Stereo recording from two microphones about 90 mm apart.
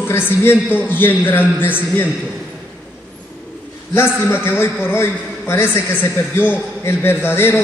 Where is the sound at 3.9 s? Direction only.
25° left (ahead or behind).